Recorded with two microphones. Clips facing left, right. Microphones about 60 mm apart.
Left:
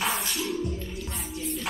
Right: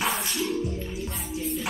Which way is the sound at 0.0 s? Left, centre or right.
Centre.